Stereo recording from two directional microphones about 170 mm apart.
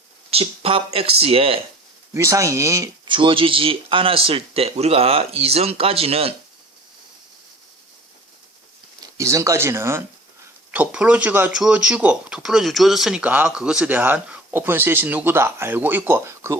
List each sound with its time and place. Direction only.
0.3 s speech: 35° right (ahead or behind)
2.1 s speech: 15° right (ahead or behind)
3.1 s speech: 30° right (ahead or behind)
9.1 s speech: 20° right (ahead or behind)